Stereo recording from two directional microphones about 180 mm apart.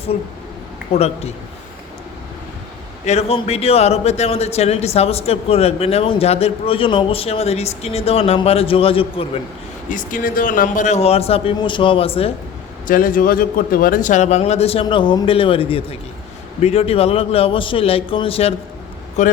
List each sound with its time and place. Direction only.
0.9 s speech: 35° left (ahead or behind)
3.1 s speech: 35° left (ahead or behind)
9.9 s speech: 45° left (ahead or behind); by 12.3 s 30° left (ahead or behind)
12.9 s speech: 50° left (ahead or behind)